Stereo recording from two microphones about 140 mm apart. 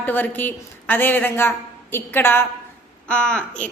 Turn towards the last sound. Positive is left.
turn(degrees=10)  # may be behind; listen again after turning